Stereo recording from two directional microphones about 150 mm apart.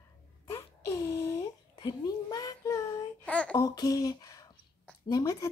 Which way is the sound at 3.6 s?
25° left (ahead or behind).